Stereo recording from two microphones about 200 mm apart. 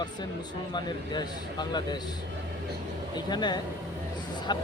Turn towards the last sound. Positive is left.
turn(degrees=20)  # may be behind; listen again after turning